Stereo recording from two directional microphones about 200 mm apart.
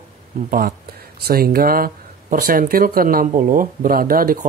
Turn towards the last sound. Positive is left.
turn(degrees=-45)  # may be behind; listen again after turning